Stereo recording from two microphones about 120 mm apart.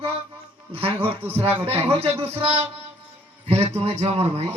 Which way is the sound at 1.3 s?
55° right (ahead or behind).